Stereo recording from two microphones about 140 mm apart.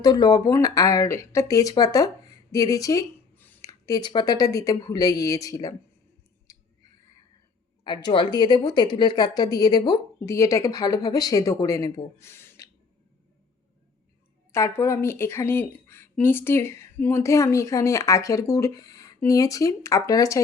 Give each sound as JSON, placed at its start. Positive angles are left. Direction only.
{"t": 0.0, "sound": "speech", "side_deg": 30}
{"t": 3.3, "sound": "a sound", "side_deg": 15}
{"t": 3.7, "sound": "speech", "side_deg": 25}
{"t": 6.5, "sound": "a sound", "side_deg": 20}
{"t": 7.9, "sound": "speech", "side_deg": 35}
{"t": 14.5, "sound": "speech", "side_deg": 20}